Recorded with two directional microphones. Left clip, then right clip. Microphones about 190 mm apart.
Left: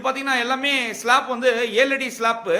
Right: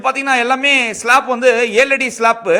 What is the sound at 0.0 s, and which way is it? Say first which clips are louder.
A man's voice: right 7 dB; 40° right (ahead or behind).